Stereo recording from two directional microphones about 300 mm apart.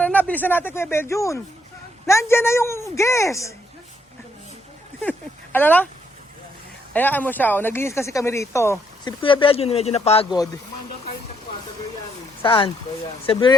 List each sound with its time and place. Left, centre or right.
0.0 s speech: centre
5.0 s speech: centre
6.9 s speech: centre
12.4 s speech: centre